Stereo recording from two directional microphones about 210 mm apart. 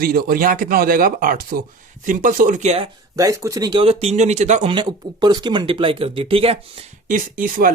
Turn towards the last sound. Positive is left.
turn(degrees=-40)  # may be behind; listen again after turning